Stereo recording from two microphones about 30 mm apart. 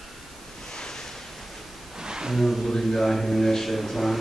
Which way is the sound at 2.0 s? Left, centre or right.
Right.